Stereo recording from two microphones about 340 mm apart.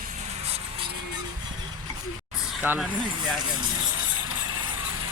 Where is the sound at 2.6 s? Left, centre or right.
Centre.